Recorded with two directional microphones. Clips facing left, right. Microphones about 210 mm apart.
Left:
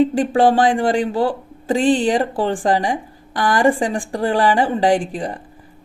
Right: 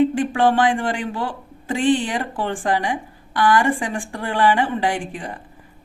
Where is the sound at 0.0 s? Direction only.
35° left (ahead or behind).